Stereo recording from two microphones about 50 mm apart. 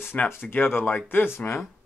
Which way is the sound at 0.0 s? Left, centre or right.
Left.